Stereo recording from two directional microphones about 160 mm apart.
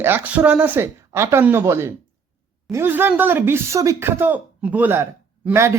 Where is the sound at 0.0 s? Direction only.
10° right (ahead or behind).